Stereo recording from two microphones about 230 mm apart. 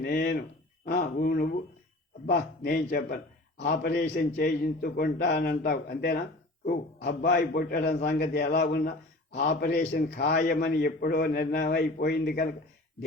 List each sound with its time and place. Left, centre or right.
0.0 s a man's voice: left